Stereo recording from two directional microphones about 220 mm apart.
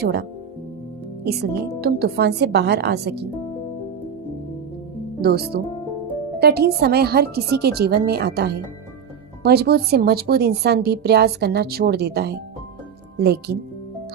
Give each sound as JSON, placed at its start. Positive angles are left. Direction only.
{"t": 0.0, "sound": "a woman's voice", "side_deg": -50}
{"t": 5.2, "sound": "a woman's voice", "side_deg": -45}